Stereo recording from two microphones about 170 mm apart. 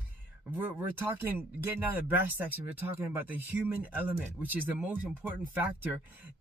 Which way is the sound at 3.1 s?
10° right (ahead or behind).